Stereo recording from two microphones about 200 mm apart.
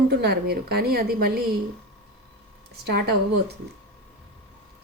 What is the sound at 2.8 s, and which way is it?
Speech, 55° right (ahead or behind).